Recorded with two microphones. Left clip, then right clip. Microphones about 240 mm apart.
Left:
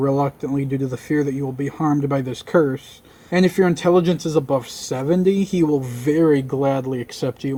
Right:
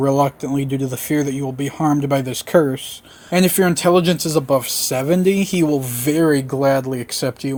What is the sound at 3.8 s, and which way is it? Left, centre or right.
Speech, right.